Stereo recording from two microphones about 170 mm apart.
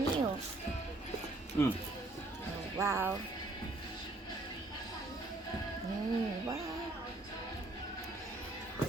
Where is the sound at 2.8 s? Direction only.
15° right (ahead or behind).